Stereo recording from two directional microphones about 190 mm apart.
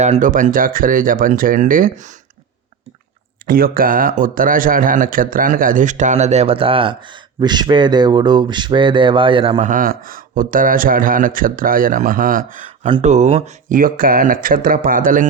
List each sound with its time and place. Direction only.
0.0 s a man's voice: 40° right (ahead or behind)
3.4 s a man's voice: 50° right (ahead or behind); by 9.6 s 25° right (ahead or behind)
9.6 s a man's voice: 45° right (ahead or behind)
12.8 s a man's voice: 35° right (ahead or behind)